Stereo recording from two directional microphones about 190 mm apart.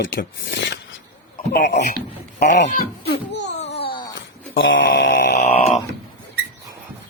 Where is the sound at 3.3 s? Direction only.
65° left (ahead or behind).